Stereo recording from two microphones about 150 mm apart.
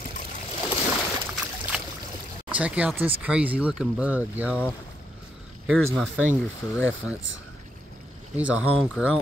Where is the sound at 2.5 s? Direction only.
10° right (ahead or behind).